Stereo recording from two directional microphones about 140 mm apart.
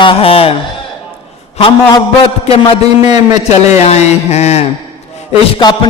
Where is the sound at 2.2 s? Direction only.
40° left (ahead or behind).